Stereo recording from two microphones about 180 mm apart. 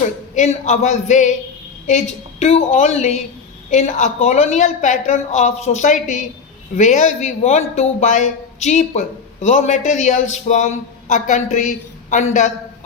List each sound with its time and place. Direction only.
0.3 s a man's voice: 40° left (ahead or behind)
2.4 s a man's voice: 35° left (ahead or behind)